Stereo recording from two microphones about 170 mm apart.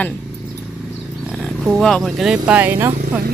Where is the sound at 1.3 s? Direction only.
Centre (ahead or behind).